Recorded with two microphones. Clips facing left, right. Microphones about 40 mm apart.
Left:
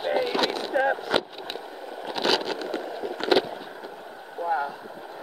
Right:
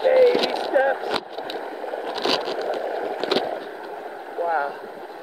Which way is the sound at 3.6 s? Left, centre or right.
Centre.